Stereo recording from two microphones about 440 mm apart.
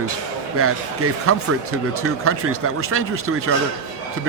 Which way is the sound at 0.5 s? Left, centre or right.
Right.